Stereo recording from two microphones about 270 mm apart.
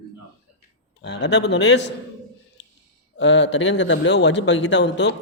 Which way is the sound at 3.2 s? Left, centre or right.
Left.